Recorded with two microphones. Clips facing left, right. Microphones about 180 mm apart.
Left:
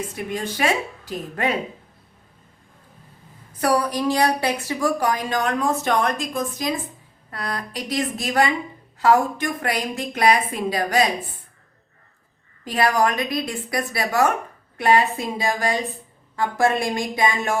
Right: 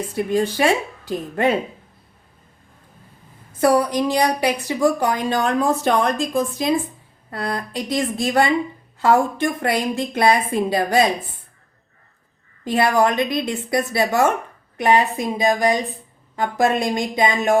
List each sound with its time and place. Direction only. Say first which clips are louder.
0.3 s a woman's voice: right 5 dB; 30° right (ahead or behind)
3.6 s a woman's voice: right 4 dB; 25° right (ahead or behind)
12.6 s a woman's voice: right 3 dB; 25° right (ahead or behind)